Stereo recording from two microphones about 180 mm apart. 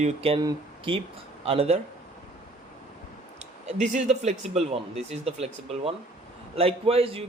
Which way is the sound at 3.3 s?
40° right (ahead or behind).